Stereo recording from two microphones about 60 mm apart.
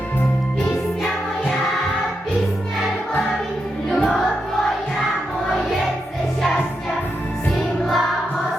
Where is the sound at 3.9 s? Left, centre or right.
Centre.